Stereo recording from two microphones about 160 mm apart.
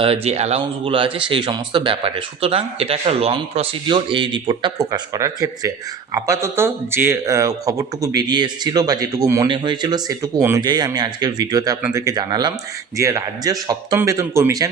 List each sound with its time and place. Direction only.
0.0 s speech: 40° right (ahead or behind); by 14.7 s 20° right (ahead or behind)